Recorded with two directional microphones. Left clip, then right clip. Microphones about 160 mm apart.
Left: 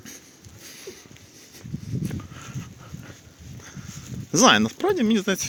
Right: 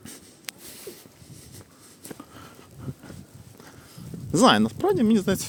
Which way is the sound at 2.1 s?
15° right (ahead or behind).